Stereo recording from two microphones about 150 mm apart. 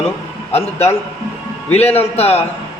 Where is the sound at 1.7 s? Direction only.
45° left (ahead or behind).